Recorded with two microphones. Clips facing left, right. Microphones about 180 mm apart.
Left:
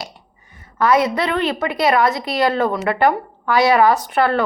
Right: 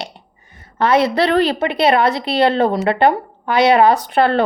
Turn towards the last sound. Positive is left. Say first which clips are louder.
# right 2 dB
turn(degrees=-30)  # may be behind; listen again after turning